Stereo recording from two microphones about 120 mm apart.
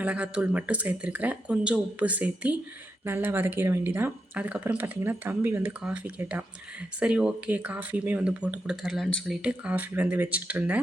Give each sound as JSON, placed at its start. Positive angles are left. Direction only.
{"t": 0.0, "sound": "speech", "side_deg": -10}